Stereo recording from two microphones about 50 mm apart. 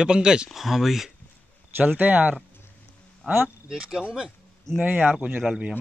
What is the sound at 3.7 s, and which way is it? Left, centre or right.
Speech, centre.